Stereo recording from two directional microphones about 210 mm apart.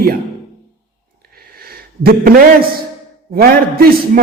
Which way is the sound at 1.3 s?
45° right (ahead or behind).